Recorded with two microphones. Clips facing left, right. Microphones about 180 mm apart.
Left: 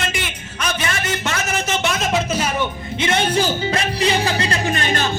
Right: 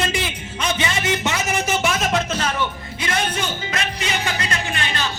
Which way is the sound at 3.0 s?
30° left (ahead or behind).